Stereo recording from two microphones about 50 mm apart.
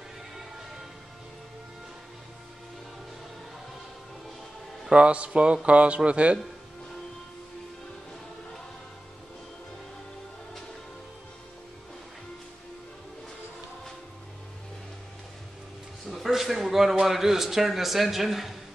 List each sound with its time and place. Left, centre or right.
4.9 s speech: right
16.1 s a sound: centre
17.0 s speech: centre